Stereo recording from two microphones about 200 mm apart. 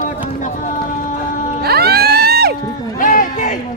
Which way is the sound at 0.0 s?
40° left (ahead or behind).